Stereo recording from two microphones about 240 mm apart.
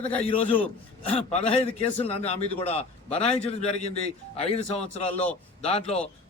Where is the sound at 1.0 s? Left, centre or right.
Left.